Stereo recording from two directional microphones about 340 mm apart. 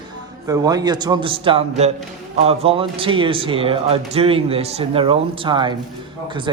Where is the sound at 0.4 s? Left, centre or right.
Centre.